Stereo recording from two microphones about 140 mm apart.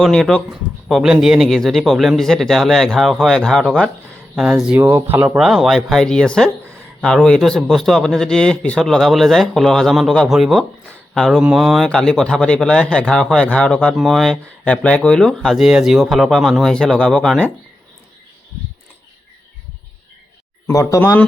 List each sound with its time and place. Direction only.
0.0 s speech: 5° left (ahead or behind); by 5.4 s 15° right (ahead or behind)
5.4 s speech: centre (ahead or behind)
20.7 s speech: 20° left (ahead or behind)